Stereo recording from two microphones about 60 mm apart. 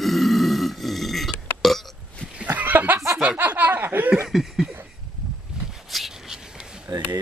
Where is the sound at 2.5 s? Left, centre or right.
Right.